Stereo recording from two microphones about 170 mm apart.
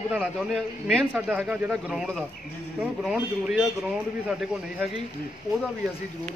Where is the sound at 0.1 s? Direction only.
Centre (ahead or behind).